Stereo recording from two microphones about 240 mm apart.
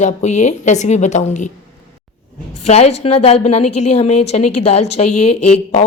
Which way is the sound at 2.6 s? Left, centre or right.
Left.